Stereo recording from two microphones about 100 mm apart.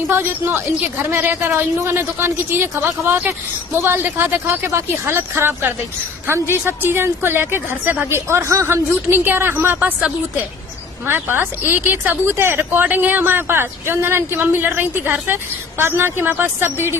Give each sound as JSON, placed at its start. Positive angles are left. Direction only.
{"t": 0.1, "sound": "a woman's voice", "side_deg": -20}